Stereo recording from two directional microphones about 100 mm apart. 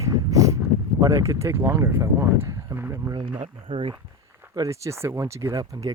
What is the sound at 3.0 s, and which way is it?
Speech, 45° right (ahead or behind).